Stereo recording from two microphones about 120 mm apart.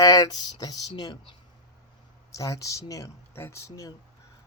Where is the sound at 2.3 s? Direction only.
30° left (ahead or behind).